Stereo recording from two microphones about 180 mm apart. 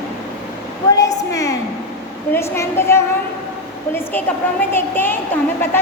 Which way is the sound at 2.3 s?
15° left (ahead or behind).